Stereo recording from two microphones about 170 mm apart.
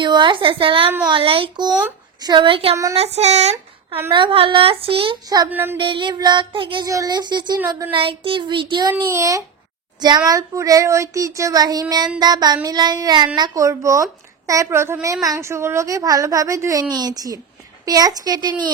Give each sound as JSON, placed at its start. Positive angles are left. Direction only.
{"t": 0.0, "sound": "a woman's voice", "side_deg": -25}
{"t": 5.5, "sound": "a sound", "side_deg": -15}
{"t": 5.8, "sound": "speech", "side_deg": -30}